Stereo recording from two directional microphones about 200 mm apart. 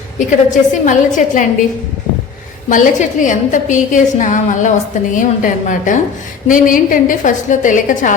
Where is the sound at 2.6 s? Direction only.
40° left (ahead or behind).